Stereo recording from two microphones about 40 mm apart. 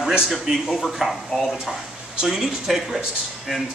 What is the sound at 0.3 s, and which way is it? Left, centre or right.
Speech, centre.